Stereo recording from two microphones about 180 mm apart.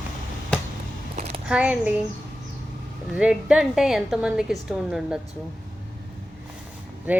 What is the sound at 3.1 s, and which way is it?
A woman's voice, 5° right (ahead or behind).